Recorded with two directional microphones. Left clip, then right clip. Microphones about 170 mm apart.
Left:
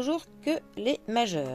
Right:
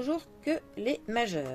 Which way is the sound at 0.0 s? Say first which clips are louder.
Left 3 dB; 35° left (ahead or behind).